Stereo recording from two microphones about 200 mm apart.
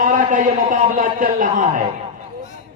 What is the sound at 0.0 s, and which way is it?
A man's voice, 45° right (ahead or behind).